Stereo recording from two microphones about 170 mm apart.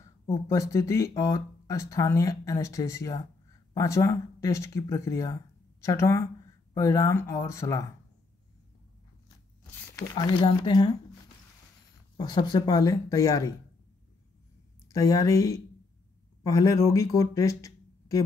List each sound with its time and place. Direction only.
0.3 s speech: 20° left (ahead or behind)
9.9 s speech: 25° left (ahead or behind)
12.2 s speech: 25° left (ahead or behind)
14.9 s speech: 20° left (ahead or behind)